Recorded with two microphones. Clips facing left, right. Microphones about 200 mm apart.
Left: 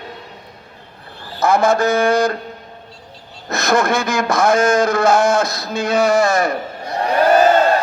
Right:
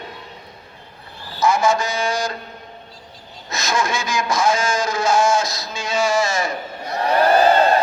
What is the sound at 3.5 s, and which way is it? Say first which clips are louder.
Speech: left 6 dB; 60° left (ahead or behind).